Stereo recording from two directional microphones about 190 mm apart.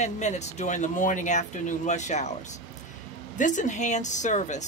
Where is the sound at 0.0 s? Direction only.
35° left (ahead or behind).